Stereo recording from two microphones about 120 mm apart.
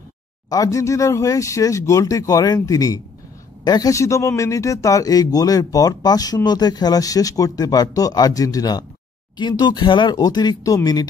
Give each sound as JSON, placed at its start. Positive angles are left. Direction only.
{"t": 0.5, "sound": "a man's voice", "side_deg": 30}